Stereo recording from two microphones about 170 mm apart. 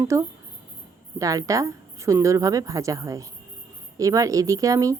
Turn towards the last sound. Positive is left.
turn(degrees=-20)  # may be behind; listen again after turning